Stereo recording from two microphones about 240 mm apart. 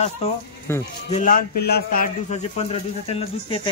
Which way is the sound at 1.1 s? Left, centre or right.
Left.